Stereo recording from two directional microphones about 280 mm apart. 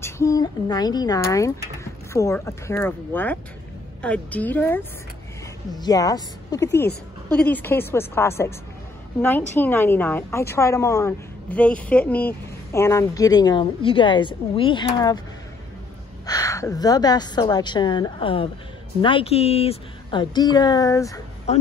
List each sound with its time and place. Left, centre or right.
0.0 s a woman's voice: centre
16.3 s a woman's voice: centre